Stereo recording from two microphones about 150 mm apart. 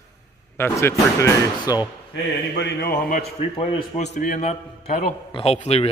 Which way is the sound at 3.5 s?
45° left (ahead or behind).